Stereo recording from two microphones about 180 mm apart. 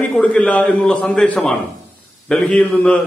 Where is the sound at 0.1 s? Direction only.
5° left (ahead or behind).